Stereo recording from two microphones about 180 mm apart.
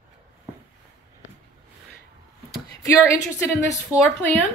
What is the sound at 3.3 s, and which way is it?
Speech, 10° left (ahead or behind).